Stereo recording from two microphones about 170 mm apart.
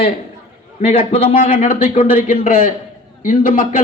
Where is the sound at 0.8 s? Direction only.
40° left (ahead or behind).